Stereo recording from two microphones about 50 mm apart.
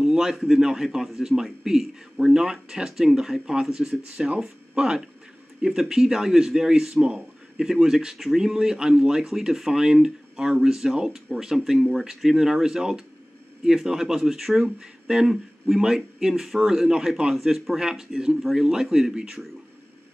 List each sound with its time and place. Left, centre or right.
0.0 s speech: centre
4.0 s speech: centre
7.5 s a man's voice: centre
19.1 s speech: centre